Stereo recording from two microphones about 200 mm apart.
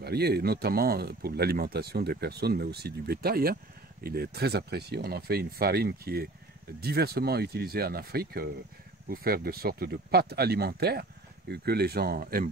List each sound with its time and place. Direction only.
0.0 s speech: 55° right (ahead or behind)